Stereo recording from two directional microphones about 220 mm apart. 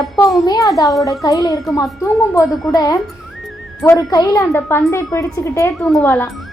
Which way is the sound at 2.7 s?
15° left (ahead or behind).